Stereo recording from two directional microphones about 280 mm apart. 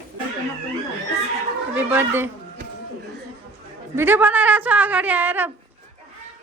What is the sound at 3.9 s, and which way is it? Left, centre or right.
A woman's voice, centre.